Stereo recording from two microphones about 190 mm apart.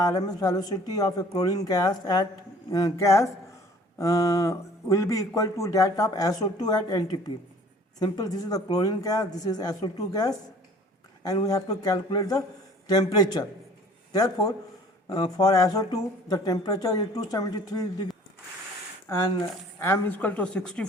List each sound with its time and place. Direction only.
0.0 s speech: 20° left (ahead or behind)
19.8 s speech: 10° left (ahead or behind)